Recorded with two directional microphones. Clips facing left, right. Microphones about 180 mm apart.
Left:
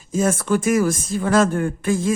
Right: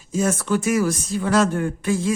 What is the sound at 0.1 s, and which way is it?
Speech, 50° left (ahead or behind).